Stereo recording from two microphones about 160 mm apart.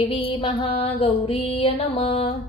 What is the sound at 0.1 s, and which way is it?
Mantra, 30° left (ahead or behind).